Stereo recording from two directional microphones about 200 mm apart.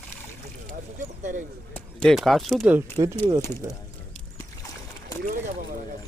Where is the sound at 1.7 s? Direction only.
5° left (ahead or behind).